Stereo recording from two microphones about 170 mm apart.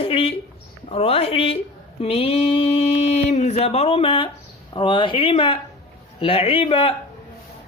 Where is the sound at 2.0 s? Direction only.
35° left (ahead or behind).